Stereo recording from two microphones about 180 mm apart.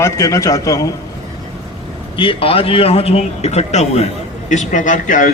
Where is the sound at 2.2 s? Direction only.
30° left (ahead or behind).